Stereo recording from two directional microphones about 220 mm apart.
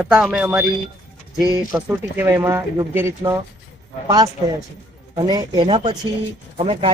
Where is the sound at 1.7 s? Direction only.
10° right (ahead or behind).